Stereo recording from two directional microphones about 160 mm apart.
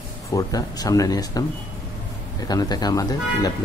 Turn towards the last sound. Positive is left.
turn(degrees=25)  # may be behind; listen again after turning